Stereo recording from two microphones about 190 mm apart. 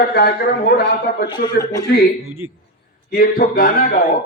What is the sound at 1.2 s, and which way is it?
Speech, 25° left (ahead or behind).